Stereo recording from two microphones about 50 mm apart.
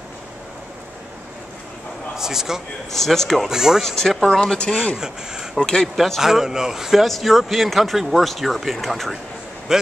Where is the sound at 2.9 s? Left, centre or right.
Centre.